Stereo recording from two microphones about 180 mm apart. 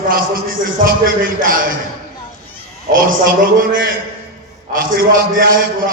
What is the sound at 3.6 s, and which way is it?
A man's voice, 50° right (ahead or behind).